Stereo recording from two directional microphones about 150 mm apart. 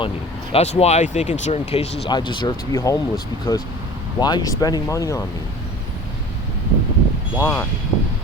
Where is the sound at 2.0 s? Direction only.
30° left (ahead or behind).